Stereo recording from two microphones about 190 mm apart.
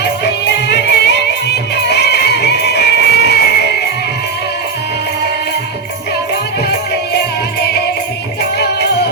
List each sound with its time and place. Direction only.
0.0 s music: 65° left (ahead or behind)
8.5 s music: 60° left (ahead or behind)